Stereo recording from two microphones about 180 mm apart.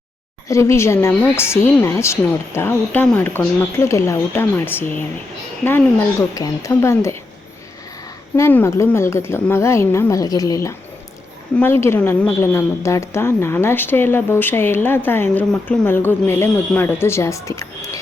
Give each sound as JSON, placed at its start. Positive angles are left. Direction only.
{"t": 0.4, "sound": "a woman's voice", "side_deg": 15}
{"t": 8.4, "sound": "a woman's voice", "side_deg": 15}